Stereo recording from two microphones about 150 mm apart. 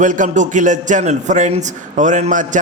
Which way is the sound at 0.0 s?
60° right (ahead or behind).